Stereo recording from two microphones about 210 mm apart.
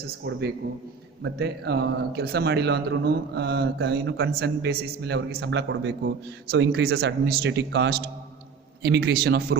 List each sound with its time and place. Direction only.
0.3 s speech: 55° right (ahead or behind)